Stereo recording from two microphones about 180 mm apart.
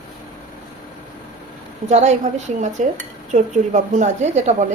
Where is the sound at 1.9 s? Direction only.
40° right (ahead or behind).